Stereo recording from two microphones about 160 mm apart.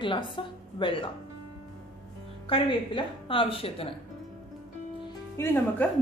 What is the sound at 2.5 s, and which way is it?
A woman's voice, 35° left (ahead or behind).